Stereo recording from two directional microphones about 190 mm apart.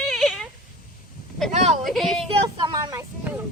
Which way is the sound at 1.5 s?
40° right (ahead or behind).